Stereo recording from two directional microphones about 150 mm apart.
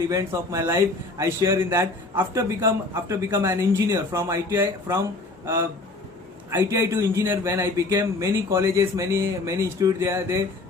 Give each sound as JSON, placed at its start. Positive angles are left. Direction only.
{"t": 0.1, "sound": "a man's voice", "side_deg": -20}
{"t": 6.5, "sound": "a man's voice", "side_deg": -20}